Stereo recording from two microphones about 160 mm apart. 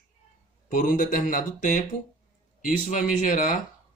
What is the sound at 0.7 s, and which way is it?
Speech, 55° left (ahead or behind).